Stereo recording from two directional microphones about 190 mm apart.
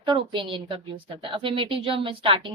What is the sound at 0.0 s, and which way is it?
Speech, 25° right (ahead or behind).